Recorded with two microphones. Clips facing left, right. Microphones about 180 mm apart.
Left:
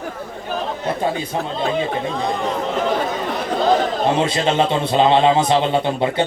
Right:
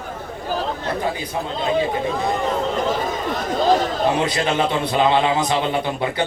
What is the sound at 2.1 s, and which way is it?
Speech, centre (ahead or behind).